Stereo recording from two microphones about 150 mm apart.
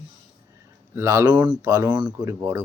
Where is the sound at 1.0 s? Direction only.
20° right (ahead or behind).